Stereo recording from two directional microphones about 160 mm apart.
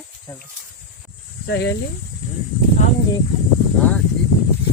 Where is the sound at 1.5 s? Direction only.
90° left.